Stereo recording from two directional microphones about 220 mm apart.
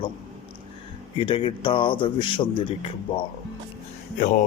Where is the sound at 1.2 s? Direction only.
25° left (ahead or behind).